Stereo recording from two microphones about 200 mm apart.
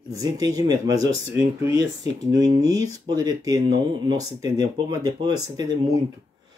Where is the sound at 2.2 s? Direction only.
15° right (ahead or behind).